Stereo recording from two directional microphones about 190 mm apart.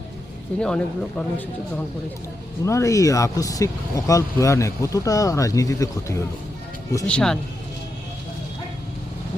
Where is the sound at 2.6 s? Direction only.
15° left (ahead or behind).